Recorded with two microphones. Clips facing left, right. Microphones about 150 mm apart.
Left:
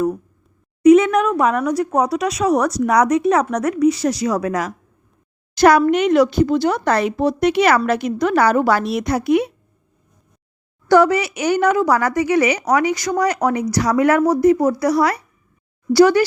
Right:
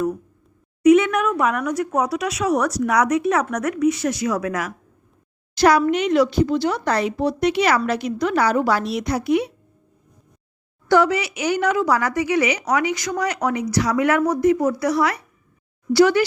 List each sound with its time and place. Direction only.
0.8 s a woman's voice: 35° left (ahead or behind)
5.5 s speech: 50° left (ahead or behind)
10.8 s a woman's voice: 45° left (ahead or behind)